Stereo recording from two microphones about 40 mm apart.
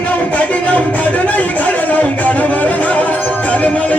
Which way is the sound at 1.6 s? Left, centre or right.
Left.